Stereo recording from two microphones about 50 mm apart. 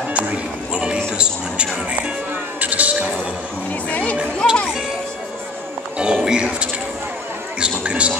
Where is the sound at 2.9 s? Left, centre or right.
Centre.